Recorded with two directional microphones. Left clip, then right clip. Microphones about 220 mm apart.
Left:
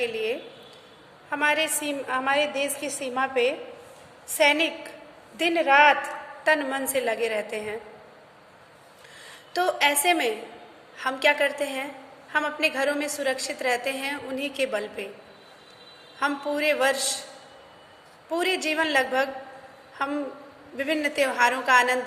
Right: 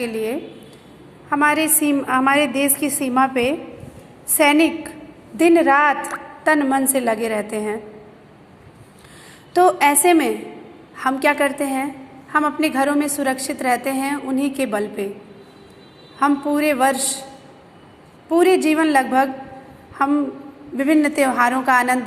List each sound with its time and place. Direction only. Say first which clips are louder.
0.0 s a woman's voice: right 4 dB; 10° right (ahead or behind)
9.5 s a woman's voice: right 8 dB; 10° right (ahead or behind)
16.2 s a woman's voice: right 7 dB; 10° right (ahead or behind)
18.3 s a woman's voice: right 10 dB; 10° right (ahead or behind)
20.7 s a woman's voice: right 8 dB; 10° right (ahead or behind)